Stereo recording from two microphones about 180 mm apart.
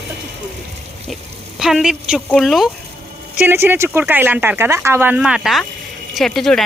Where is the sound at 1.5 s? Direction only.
Centre (ahead or behind).